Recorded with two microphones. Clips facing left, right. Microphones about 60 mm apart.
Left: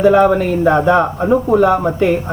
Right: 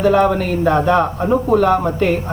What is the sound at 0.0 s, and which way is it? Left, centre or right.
Speech, centre.